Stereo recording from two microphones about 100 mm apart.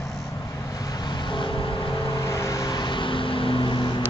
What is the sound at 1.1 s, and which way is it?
Vehicle, 55° left (ahead or behind).